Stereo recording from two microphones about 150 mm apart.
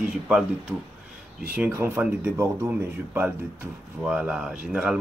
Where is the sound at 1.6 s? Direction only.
15° right (ahead or behind).